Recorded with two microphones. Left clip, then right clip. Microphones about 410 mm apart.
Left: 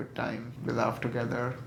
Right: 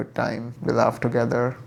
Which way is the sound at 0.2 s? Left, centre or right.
Right.